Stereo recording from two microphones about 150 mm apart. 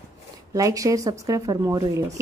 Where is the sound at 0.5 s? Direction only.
20° right (ahead or behind).